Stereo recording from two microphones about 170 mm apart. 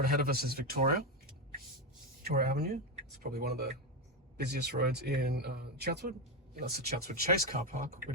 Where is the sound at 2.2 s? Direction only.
70° right (ahead or behind).